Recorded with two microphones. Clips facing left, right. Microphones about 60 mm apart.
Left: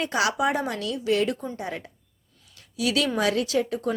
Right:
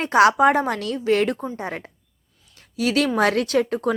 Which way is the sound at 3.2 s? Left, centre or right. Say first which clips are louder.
Right 4 dB; right.